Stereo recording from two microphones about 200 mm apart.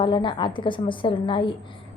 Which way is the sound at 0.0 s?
25° left (ahead or behind).